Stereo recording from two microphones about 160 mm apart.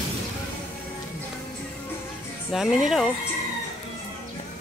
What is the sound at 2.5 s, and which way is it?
Speech, centre (ahead or behind).